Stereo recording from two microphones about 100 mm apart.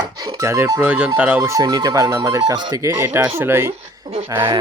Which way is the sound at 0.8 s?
15° right (ahead or behind).